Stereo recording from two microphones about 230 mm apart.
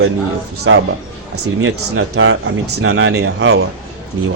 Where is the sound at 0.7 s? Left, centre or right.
Right.